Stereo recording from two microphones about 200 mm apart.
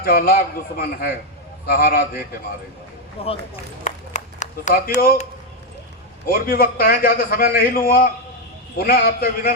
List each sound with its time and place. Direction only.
0.0 s a man's voice: 50° left (ahead or behind)
3.2 s speech: 30° left (ahead or behind)
3.8 s a sound: 35° left (ahead or behind)
6.2 s a man's voice: 45° left (ahead or behind)